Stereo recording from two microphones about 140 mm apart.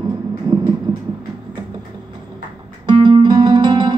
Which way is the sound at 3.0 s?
30° right (ahead or behind).